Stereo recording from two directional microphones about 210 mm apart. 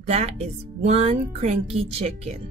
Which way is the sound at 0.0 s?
30° right (ahead or behind).